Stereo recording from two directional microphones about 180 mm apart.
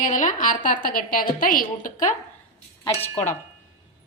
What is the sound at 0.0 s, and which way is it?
A woman's voice, 45° left (ahead or behind).